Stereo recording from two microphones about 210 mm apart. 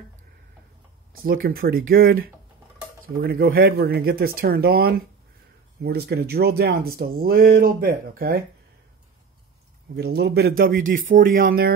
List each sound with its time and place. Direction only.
1.1 s speech: 45° right (ahead or behind)
9.9 s speech: 50° right (ahead or behind)